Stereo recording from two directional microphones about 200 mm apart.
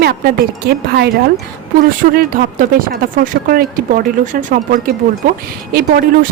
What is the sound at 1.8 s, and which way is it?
Speech, 45° right (ahead or behind).